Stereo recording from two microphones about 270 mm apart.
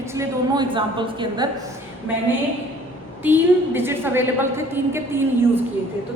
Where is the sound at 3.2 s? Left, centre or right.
Centre.